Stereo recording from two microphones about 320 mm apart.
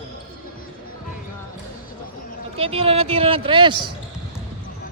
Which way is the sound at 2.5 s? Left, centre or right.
Centre.